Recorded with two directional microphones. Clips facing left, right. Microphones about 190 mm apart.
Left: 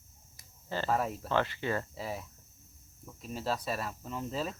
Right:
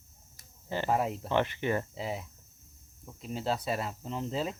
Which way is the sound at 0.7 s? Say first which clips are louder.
Right 2 dB; 15° right (ahead or behind).